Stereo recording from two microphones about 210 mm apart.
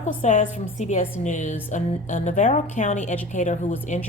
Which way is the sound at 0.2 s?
35° left (ahead or behind).